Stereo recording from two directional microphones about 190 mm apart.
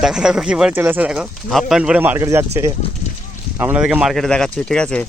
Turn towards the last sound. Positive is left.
turn(degrees=5)  # may be behind; listen again after turning